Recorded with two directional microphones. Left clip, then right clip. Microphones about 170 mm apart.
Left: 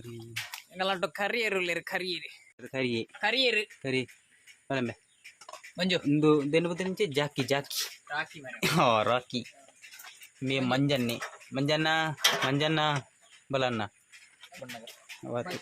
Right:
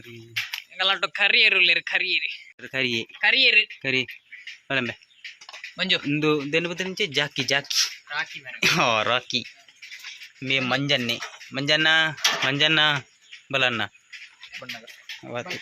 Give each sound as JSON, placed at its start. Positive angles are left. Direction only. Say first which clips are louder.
{"t": 0.8, "sound": "speech", "louder": "right 8 dB", "side_deg": 30}
{"t": 1.5, "sound": "speech", "louder": "right 11 dB", "side_deg": 10}
{"t": 2.7, "sound": "speech", "louder": "right 7 dB", "side_deg": 0}
{"t": 3.2, "sound": "speech", "louder": "right 9 dB", "side_deg": 35}
{"t": 3.8, "sound": "speech", "louder": "right 8 dB", "side_deg": 0}
{"t": 5.7, "sound": "speech", "louder": "right 6 dB", "side_deg": 35}
{"t": 6.1, "sound": "speech", "louder": "right 2 dB", "side_deg": 0}
{"t": 8.1, "sound": "speech", "louder": "right 5 dB", "side_deg": 30}
{"t": 8.6, "sound": "speech", "louder": "right 4 dB", "side_deg": 5}
{"t": 15.2, "sound": "speech", "louder": "right 1 dB", "side_deg": 5}